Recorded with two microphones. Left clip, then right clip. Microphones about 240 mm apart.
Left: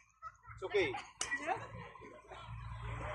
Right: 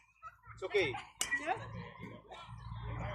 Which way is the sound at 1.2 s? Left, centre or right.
Right.